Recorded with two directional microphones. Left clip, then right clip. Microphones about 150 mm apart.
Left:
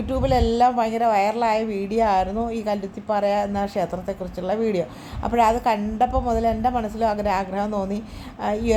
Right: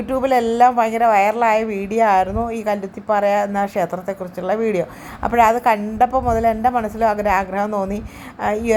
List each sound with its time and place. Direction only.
0.1 s a woman's voice: 15° right (ahead or behind)